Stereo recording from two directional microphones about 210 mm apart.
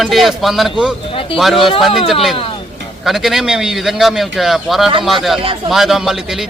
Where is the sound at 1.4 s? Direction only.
Centre (ahead or behind).